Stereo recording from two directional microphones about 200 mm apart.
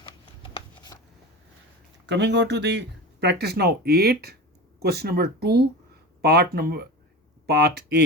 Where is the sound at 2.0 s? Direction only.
60° right (ahead or behind).